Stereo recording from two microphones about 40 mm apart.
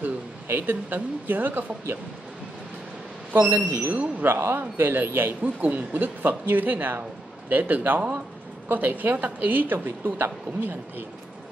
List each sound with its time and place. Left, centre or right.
0.0 s speech: right
3.3 s speech: right
3.9 s speech: right
4.3 s speech: right
5.4 s a woman's voice: right